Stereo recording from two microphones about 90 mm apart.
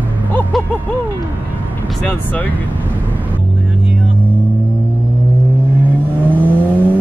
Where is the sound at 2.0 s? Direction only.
20° left (ahead or behind).